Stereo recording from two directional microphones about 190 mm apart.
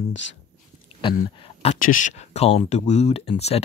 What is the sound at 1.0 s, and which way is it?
Speech, 25° left (ahead or behind).